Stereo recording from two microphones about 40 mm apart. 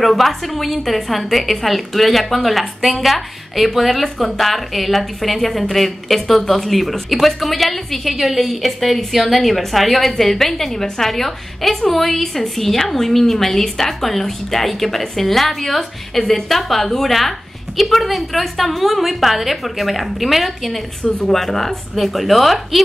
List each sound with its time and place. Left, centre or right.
0.0 s a woman's voice: centre